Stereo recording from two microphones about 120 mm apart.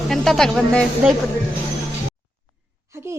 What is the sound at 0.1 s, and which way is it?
Speech, 5° left (ahead or behind).